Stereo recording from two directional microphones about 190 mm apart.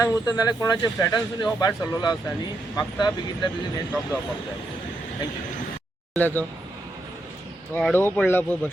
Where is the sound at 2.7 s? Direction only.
20° left (ahead or behind).